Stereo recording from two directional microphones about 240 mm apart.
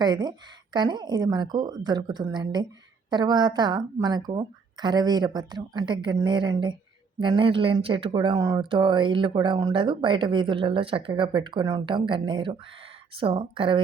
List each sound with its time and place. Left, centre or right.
0.0 s speech: centre